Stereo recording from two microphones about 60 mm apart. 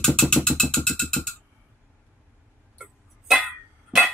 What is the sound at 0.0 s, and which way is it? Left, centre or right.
Music, centre.